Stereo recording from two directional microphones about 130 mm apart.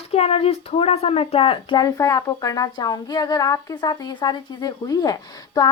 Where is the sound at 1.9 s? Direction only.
25° left (ahead or behind).